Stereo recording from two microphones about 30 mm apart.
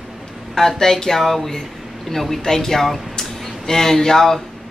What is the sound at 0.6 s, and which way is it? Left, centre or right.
Speech, centre.